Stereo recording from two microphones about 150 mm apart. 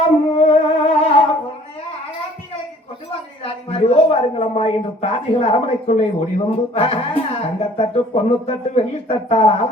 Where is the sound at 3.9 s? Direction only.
40° left (ahead or behind).